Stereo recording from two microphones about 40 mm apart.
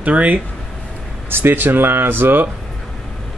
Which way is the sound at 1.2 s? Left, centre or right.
Right.